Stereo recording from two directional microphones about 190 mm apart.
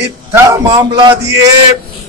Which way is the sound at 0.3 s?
15° right (ahead or behind).